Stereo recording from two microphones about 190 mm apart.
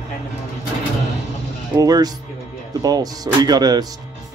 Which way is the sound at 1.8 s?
20° right (ahead or behind).